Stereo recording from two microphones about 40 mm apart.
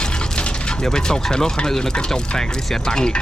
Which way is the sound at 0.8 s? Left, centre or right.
Centre.